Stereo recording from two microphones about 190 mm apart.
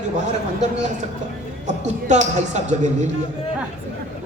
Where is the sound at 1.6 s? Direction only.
40° right (ahead or behind).